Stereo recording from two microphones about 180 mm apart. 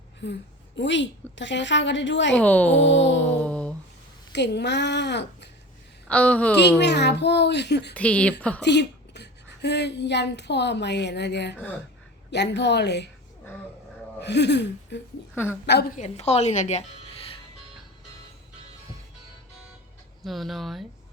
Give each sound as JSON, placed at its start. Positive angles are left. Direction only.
{"t": 0.2, "sound": "a woman's voice", "side_deg": 85}
{"t": 2.3, "sound": "a woman's voice", "side_deg": 10}
{"t": 2.8, "sound": "music", "side_deg": 90}
{"t": 3.2, "sound": "mantra", "side_deg": 5}
{"t": 4.3, "sound": "speech", "side_deg": 70}
{"t": 6.1, "sound": "a woman's voice", "side_deg": 5}
{"t": 6.6, "sound": "speech", "side_deg": 70}
{"t": 7.9, "sound": "a woman's voice", "side_deg": 5}
{"t": 8.6, "sound": "speech", "side_deg": 70}
{"t": 14.2, "sound": "speech", "side_deg": 70}
{"t": 16.0, "sound": "speech", "side_deg": 35}
{"t": 20.2, "sound": "speech", "side_deg": 0}